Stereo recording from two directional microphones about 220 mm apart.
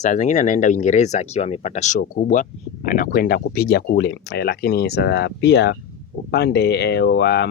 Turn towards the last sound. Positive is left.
turn(degrees=50)  # may be behind; listen again after turning